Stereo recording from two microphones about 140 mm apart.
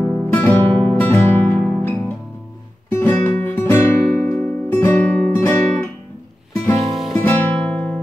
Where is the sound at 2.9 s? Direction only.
15° left (ahead or behind).